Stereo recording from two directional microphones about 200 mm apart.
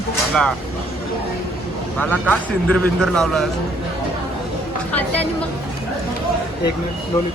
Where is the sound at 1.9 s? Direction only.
5° left (ahead or behind).